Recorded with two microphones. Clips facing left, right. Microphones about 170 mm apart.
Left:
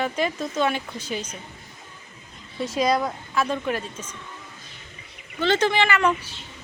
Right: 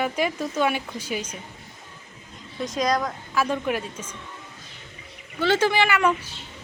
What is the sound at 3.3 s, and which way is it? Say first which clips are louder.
Speech: right 1 dB; 10° right (ahead or behind).